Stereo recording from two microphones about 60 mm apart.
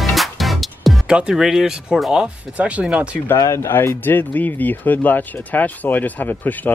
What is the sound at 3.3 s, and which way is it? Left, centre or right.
Speech, left.